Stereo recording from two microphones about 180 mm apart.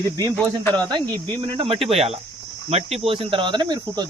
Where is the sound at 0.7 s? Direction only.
25° right (ahead or behind).